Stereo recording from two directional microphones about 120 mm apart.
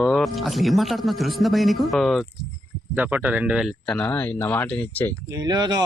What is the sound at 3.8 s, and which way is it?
Speech, 5° left (ahead or behind).